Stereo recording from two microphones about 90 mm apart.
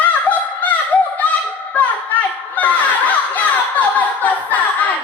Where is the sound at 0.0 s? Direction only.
15° left (ahead or behind).